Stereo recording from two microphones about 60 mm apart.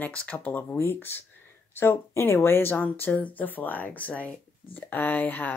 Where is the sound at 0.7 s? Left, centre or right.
Left.